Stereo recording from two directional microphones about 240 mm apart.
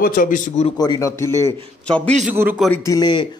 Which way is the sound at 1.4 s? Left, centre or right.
Right.